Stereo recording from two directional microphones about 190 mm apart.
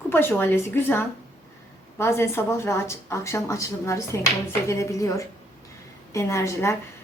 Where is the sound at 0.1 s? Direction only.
10° left (ahead or behind).